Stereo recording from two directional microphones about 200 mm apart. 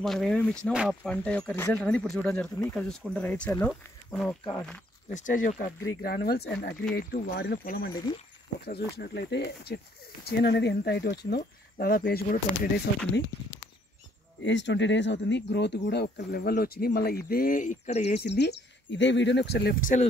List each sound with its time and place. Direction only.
0.0 s speech: centre (ahead or behind)
5.1 s speech: 40° left (ahead or behind)
8.9 s speech: 55° left (ahead or behind)
14.4 s speech: 65° left (ahead or behind); by 18.1 s 35° left (ahead or behind)
18.1 s speech: 55° left (ahead or behind); by 20.1 s 40° left (ahead or behind)